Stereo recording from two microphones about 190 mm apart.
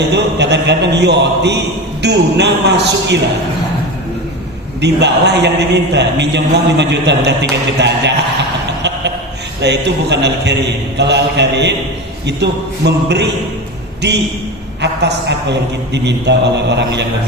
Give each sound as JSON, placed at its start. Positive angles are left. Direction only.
{"t": 0.1, "sound": "a man's voice", "side_deg": -65}
{"t": 4.8, "sound": "a man's voice", "side_deg": -65}
{"t": 9.6, "sound": "a man's voice", "side_deg": -65}